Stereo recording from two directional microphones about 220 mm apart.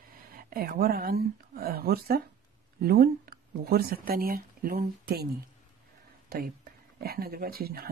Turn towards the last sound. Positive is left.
turn(degrees=-45)  # may be behind; listen again after turning